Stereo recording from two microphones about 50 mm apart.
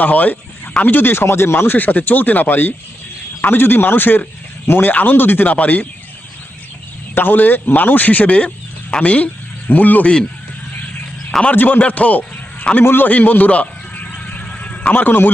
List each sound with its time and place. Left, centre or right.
0.0 s speech: left
7.2 s speech: left
11.5 s a man's voice: left
12.8 s neigh: left